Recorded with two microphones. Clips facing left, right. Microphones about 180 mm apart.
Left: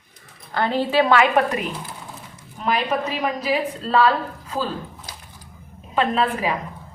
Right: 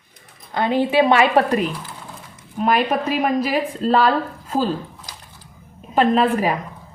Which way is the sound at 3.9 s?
40° right (ahead or behind).